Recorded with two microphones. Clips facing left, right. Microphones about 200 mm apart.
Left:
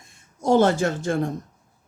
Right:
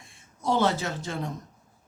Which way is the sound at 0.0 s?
45° left (ahead or behind).